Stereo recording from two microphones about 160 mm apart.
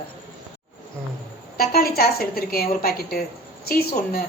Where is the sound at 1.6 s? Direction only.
70° left (ahead or behind).